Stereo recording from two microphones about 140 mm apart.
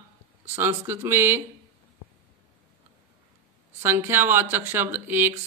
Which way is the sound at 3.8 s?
15° right (ahead or behind).